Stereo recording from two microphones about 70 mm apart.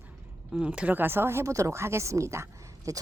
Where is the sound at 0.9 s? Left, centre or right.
Right.